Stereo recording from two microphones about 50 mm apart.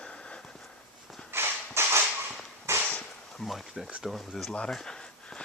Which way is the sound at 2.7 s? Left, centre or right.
Right.